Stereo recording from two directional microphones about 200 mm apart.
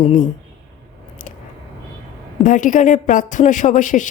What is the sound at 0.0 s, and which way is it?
Speech, 35° left (ahead or behind).